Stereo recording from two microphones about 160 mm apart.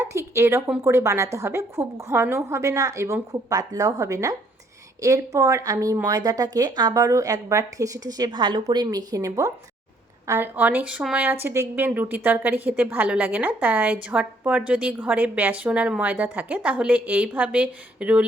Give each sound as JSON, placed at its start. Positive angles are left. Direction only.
{"t": 0.0, "sound": "a woman's voice", "side_deg": -15}